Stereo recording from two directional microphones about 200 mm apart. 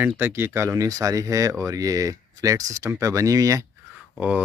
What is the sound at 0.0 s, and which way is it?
Speech, 10° right (ahead or behind).